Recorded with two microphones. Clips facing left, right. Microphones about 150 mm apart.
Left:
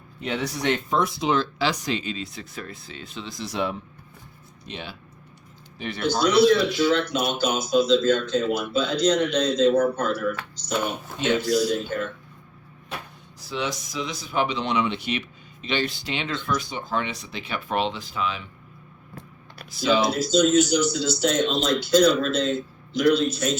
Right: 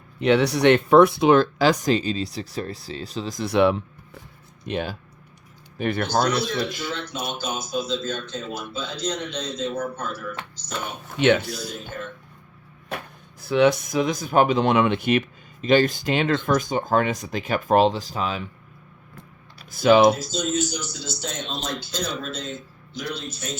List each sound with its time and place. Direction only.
0.2 s speech: 75° right (ahead or behind); by 3.4 s 40° right (ahead or behind)
3.4 s speech: 65° right (ahead or behind)
4.6 s speech: 50° right (ahead or behind)
6.3 s speech: 70° left (ahead or behind)
11.2 s speech: 65° right (ahead or behind)
11.7 s speech: 60° left (ahead or behind)
13.4 s speech: 60° right (ahead or behind); by 18.4 s 40° right (ahead or behind)
19.7 s speech: 55° right (ahead or behind)
20.1 s speech: 65° left (ahead or behind)